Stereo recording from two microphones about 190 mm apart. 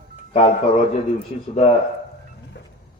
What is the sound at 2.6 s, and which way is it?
Music, 65° left (ahead or behind).